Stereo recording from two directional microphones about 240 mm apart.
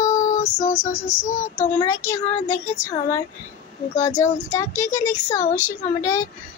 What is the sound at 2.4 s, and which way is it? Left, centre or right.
Child singing, left.